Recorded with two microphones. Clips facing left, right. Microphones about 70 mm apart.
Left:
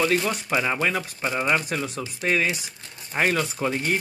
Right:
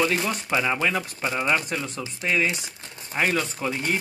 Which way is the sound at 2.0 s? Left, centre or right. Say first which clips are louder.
Even; left.